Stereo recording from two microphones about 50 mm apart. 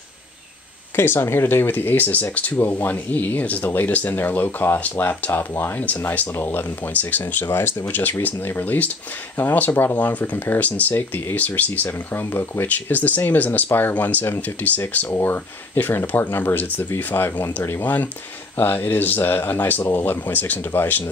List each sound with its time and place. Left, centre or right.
0.9 s speech: left
5.3 s speech: left
5.8 s speech: left
6.3 s speech: left
6.9 s speech: left
7.4 s speech: left
7.9 s speech: left
9.7 s speech: left
9.9 s speech: left
12.1 s speech: left
15.0 s speech: left
16.9 s speech: left
17.7 s speech: left